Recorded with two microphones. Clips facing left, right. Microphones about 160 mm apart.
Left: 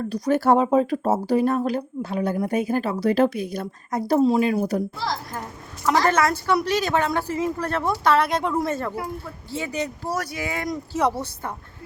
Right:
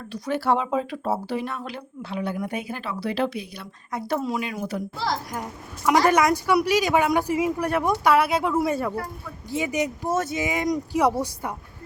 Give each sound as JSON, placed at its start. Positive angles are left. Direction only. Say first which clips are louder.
{"t": 0.0, "sound": "speech", "louder": "left 6 dB", "side_deg": 45}
{"t": 4.2, "sound": "a woman's voice", "louder": "left 9 dB", "side_deg": 30}
{"t": 5.3, "sound": "a woman's voice", "louder": "right 1 dB", "side_deg": -10}